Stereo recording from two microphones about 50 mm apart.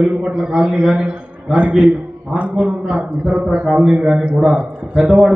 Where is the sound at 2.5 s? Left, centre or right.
Centre.